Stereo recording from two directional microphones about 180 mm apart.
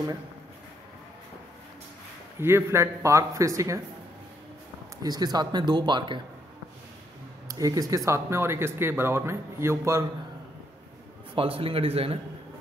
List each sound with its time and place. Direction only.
2.4 s speech: 15° right (ahead or behind)
5.0 s speech: 20° right (ahead or behind)
7.4 s speech: 20° right (ahead or behind)
11.3 s a man's voice: 30° right (ahead or behind)